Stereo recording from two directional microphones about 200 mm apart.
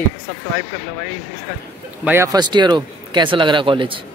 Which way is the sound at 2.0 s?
10° right (ahead or behind).